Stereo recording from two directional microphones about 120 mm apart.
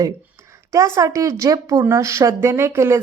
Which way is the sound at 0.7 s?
25° right (ahead or behind).